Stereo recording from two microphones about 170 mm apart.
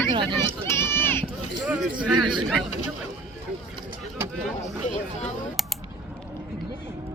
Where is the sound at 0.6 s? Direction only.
15° left (ahead or behind).